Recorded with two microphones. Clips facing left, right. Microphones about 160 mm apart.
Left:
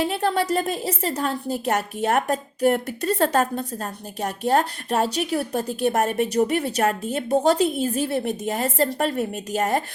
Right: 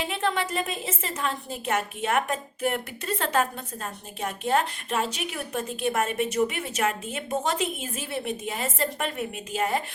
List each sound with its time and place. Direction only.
0.0 s a woman's voice: 40° left (ahead or behind)